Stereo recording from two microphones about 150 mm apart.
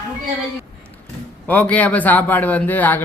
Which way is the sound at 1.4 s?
10° left (ahead or behind).